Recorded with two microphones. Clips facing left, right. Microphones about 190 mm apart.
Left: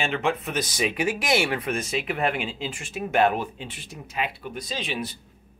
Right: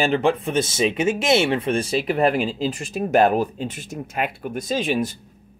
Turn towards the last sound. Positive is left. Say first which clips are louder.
# right 9 dB
turn(degrees=-45)  # may be behind; listen again after turning